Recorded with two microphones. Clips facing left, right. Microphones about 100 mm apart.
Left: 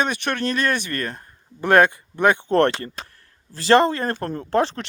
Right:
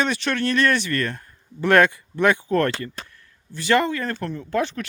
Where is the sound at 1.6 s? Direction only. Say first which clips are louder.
Left 1 dB; 20° left (ahead or behind); by 4.4 s 45° left (ahead or behind).